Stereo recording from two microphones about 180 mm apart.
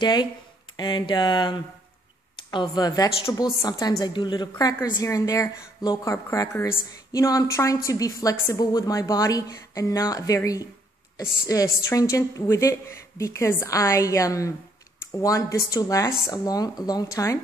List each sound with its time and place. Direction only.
0.0 s a woman's voice: 25° left (ahead or behind)